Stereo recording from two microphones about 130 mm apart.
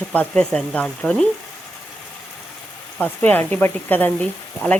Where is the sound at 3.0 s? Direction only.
15° left (ahead or behind).